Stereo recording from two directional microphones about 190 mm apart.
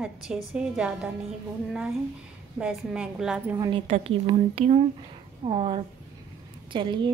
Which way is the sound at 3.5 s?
20° right (ahead or behind).